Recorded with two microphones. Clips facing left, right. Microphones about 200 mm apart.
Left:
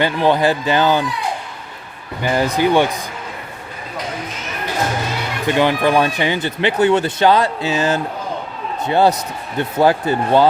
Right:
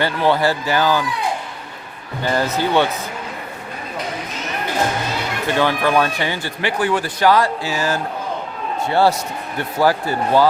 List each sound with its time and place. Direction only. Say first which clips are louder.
0.0 s speech: left 2 dB; 15° left (ahead or behind)
2.2 s speech: left 3 dB; 15° left (ahead or behind)
5.5 s speech: left 2 dB; 15° left (ahead or behind)